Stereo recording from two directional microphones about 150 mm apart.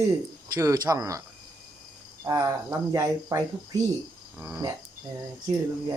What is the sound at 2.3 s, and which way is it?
Speech, 25° right (ahead or behind).